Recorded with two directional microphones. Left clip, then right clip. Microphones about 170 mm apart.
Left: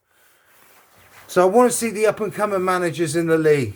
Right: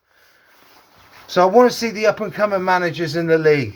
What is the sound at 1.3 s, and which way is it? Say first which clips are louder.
Speech: right 2 dB; 35° left (ahead or behind).